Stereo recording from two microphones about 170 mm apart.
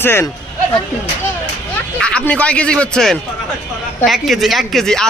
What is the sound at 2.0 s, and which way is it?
A man's voice, 5° left (ahead or behind).